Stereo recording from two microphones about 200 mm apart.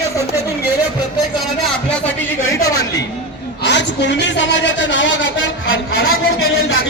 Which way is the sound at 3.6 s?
60° left (ahead or behind).